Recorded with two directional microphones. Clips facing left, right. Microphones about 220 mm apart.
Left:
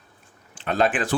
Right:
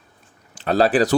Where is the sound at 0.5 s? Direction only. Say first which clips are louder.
Right 6 dB; 35° right (ahead or behind).